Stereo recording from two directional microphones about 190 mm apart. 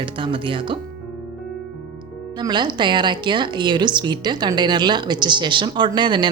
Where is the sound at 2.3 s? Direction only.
25° right (ahead or behind).